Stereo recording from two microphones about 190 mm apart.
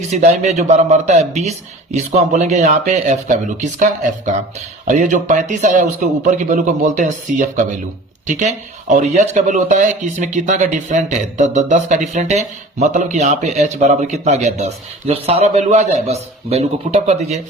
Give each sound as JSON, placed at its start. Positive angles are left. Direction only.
{"t": 0.1, "sound": "speech", "side_deg": -35}